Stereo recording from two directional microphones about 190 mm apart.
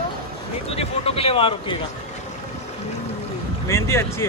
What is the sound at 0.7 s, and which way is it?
Speech, 30° left (ahead or behind).